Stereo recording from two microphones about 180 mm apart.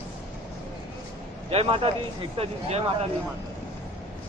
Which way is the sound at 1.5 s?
30° right (ahead or behind).